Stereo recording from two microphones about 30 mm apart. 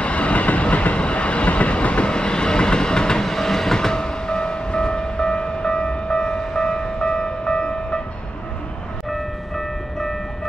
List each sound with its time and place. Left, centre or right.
0.0 s train: left
2.0 s train: left
3.3 s train: centre
6.6 s music: left